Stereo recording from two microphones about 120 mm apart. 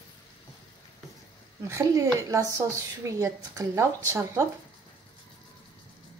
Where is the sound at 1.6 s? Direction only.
25° right (ahead or behind).